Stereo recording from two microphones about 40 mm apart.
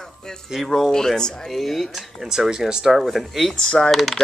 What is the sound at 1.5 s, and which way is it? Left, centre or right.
Speech, centre.